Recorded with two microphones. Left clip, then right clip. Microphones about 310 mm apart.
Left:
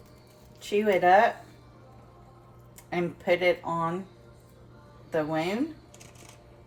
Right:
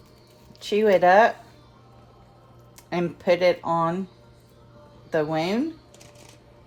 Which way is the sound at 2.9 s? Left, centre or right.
Right.